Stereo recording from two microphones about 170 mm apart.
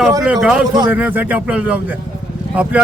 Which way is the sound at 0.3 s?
5° right (ahead or behind).